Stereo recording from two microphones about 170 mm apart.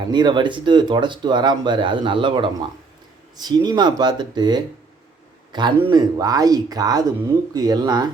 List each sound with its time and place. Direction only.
0.0 s speech: 25° right (ahead or behind)